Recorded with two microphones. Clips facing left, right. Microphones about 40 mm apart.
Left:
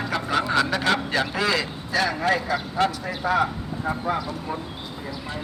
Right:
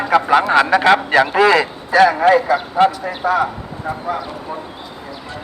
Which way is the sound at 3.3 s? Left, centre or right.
Centre.